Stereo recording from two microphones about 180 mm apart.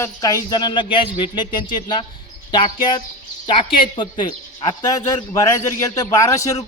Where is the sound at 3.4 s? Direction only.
30° left (ahead or behind).